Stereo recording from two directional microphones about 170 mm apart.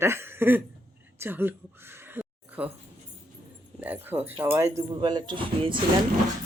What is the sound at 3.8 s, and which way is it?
Speech, 10° right (ahead or behind).